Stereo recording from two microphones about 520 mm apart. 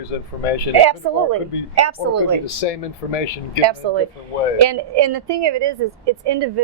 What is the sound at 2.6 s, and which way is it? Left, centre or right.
Speech, left.